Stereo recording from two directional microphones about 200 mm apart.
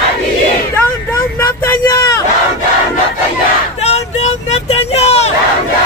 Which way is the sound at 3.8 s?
30° left (ahead or behind).